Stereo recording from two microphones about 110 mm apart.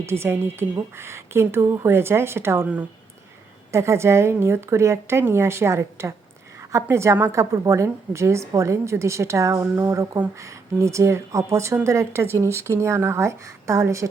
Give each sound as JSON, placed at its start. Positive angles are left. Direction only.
{"t": 0.0, "sound": "a woman's voice", "side_deg": -20}
{"t": 3.7, "sound": "a woman's voice", "side_deg": -25}